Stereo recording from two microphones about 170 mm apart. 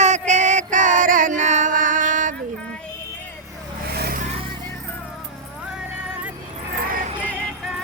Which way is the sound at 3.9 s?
65° right (ahead or behind).